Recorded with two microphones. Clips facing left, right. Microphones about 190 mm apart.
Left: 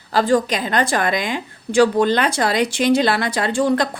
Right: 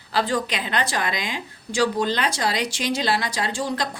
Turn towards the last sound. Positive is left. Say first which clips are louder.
# left 8 dB
turn(degrees=55)  # may be behind; listen again after turning